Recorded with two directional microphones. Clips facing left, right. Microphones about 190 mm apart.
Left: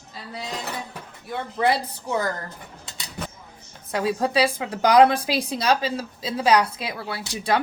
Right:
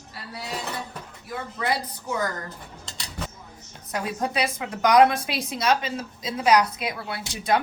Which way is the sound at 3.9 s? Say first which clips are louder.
Left 5 dB; 30° left (ahead or behind).